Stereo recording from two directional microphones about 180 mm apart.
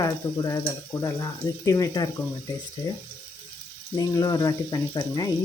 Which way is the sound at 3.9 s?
20° left (ahead or behind).